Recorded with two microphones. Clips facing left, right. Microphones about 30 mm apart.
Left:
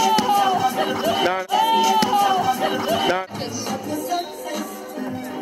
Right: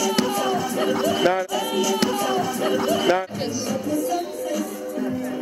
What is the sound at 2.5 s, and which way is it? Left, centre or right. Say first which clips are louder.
Music: left 2 dB; left.